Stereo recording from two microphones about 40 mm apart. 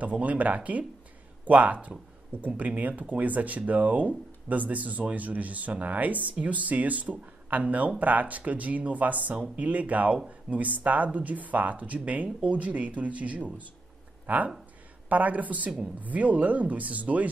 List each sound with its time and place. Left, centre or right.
0.0 s speech: right